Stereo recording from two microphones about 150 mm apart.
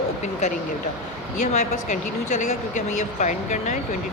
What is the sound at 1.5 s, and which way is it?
Speech, 55° left (ahead or behind).